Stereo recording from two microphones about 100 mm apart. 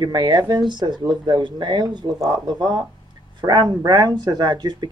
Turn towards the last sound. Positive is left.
turn(degrees=-45)  # may be behind; listen again after turning